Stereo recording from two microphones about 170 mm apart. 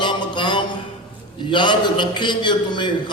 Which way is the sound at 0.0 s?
25° left (ahead or behind).